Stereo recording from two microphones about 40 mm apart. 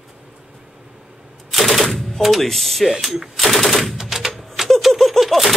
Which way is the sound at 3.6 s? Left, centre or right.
Centre.